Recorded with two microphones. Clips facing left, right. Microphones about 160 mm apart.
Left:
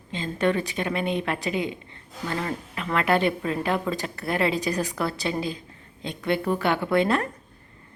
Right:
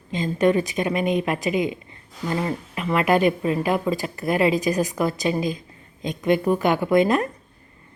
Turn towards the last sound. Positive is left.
turn(degrees=-15)  # may be behind; listen again after turning